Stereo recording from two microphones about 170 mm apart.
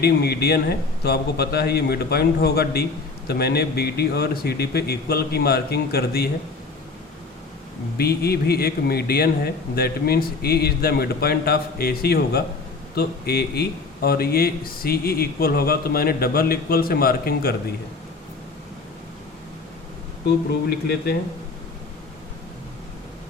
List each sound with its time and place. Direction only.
0.0 s speech: 70° left (ahead or behind)
7.9 s a man's voice: 65° left (ahead or behind)
20.2 s speech: 70° left (ahead or behind)